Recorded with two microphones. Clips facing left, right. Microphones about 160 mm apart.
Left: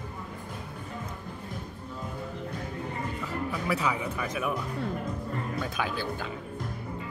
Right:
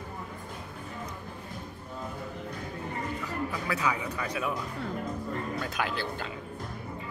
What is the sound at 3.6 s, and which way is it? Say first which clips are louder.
Music: left 2 dB; 25° left (ahead or behind).